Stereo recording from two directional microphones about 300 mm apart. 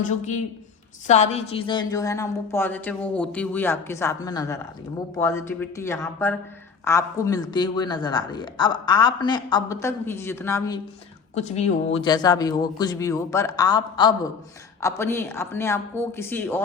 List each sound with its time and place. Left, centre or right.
0.0 s a woman's voice: left
11.3 s a woman's voice: left